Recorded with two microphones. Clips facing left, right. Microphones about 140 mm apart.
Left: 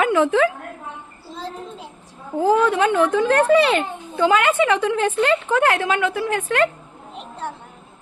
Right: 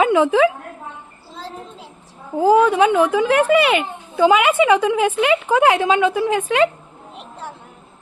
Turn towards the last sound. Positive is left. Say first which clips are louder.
# right 3 dB
turn(degrees=-15)  # may be behind; listen again after turning